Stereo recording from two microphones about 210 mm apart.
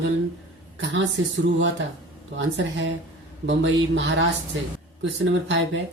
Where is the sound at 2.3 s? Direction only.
60° right (ahead or behind).